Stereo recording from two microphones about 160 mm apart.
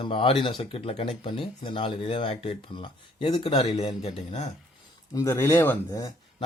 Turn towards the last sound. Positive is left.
turn(degrees=20)  # may be behind; listen again after turning